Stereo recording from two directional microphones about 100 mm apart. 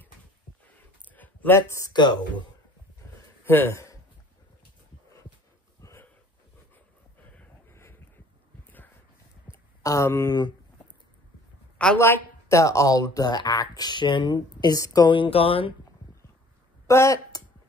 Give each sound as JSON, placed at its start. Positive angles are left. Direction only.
{"t": 1.0, "sound": "a sound", "side_deg": 15}
{"t": 1.9, "sound": "speech", "side_deg": 45}
{"t": 3.4, "sound": "speech", "side_deg": 20}
{"t": 8.6, "sound": "a sound", "side_deg": 20}
{"t": 9.5, "sound": "a sound", "side_deg": -15}
{"t": 9.8, "sound": "speech", "side_deg": 30}
{"t": 12.0, "sound": "speech", "side_deg": 25}
{"t": 15.0, "sound": "speech", "side_deg": 65}
{"t": 16.8, "sound": "speech", "side_deg": 30}